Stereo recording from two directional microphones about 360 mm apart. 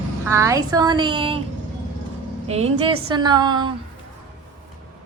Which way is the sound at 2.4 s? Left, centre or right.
Centre.